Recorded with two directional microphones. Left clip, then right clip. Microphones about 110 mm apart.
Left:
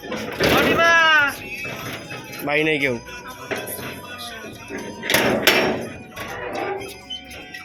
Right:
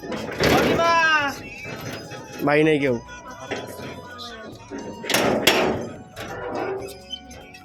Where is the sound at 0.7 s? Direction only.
90° right.